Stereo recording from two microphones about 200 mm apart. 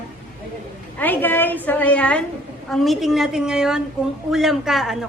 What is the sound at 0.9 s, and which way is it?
A woman's voice, 10° left (ahead or behind).